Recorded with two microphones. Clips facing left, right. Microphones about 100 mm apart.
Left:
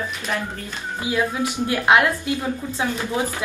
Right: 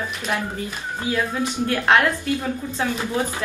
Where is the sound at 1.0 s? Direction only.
10° left (ahead or behind).